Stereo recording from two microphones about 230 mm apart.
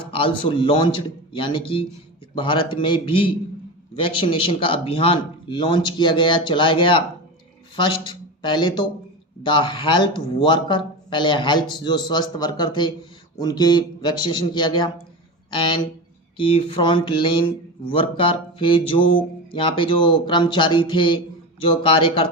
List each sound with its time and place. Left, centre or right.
0.1 s speech: left